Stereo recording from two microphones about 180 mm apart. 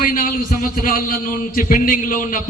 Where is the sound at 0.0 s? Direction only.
50° left (ahead or behind).